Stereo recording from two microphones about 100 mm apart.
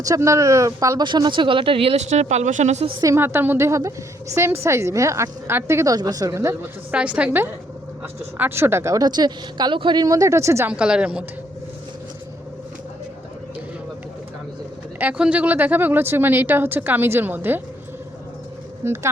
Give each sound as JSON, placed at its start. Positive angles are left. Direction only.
{"t": 0.0, "sound": "a woman's voice", "side_deg": -30}
{"t": 1.0, "sound": "speech", "side_deg": -50}
{"t": 3.0, "sound": "a woman's voice", "side_deg": -25}
{"t": 6.9, "sound": "a woman's voice", "side_deg": -10}
{"t": 10.7, "sound": "a woman's voice", "side_deg": -10}
{"t": 14.9, "sound": "a woman's voice", "side_deg": -15}
{"t": 18.8, "sound": "a woman's voice", "side_deg": -25}